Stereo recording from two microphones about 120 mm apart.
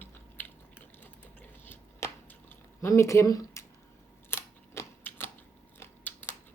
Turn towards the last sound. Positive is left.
turn(degrees=20)  # may be behind; listen again after turning